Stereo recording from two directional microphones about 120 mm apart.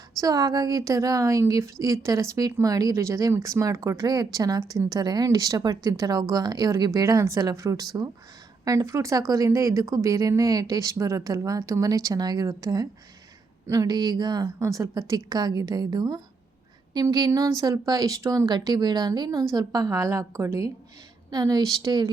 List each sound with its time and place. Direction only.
0.2 s a woman's voice: 30° right (ahead or behind)